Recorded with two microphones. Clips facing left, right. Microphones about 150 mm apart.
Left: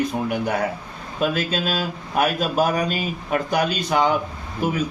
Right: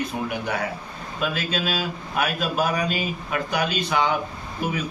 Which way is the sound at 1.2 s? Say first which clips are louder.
Left 4 dB; 45° left (ahead or behind).